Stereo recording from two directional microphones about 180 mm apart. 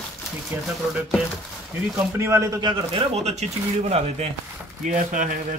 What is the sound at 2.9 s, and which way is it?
Speech, 35° right (ahead or behind).